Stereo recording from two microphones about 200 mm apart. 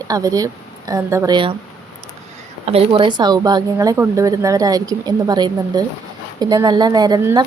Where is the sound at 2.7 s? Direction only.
25° right (ahead or behind).